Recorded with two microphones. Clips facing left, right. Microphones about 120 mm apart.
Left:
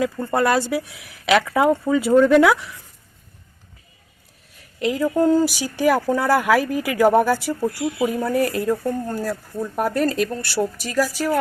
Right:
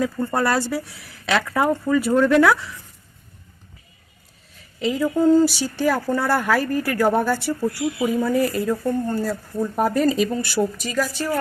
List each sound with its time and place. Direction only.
0.4 s speech: 15° left (ahead or behind)
4.8 s speech: 5° left (ahead or behind)
8.0 s speech: centre (ahead or behind)